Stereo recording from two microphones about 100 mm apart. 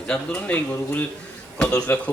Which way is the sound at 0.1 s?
15° left (ahead or behind).